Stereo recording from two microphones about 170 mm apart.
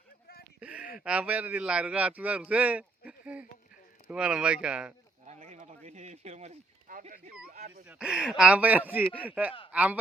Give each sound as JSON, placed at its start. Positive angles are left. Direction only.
{"t": 0.6, "sound": "speech", "side_deg": -5}
{"t": 5.2, "sound": "a sound", "side_deg": -40}
{"t": 7.9, "sound": "speech", "side_deg": -5}